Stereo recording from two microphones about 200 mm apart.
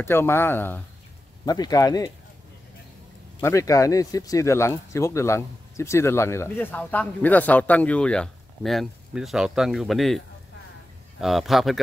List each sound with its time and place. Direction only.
0.0 s speech: 10° left (ahead or behind)
3.3 s speech: 15° left (ahead or behind)